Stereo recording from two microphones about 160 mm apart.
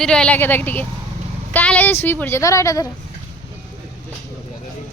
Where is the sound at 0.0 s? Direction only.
5° left (ahead or behind); by 2.9 s 20° left (ahead or behind).